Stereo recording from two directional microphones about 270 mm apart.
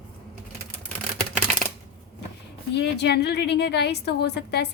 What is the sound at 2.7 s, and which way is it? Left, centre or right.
A woman's voice, left.